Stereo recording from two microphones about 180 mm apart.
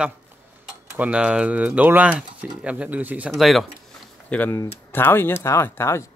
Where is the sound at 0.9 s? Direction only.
5° right (ahead or behind).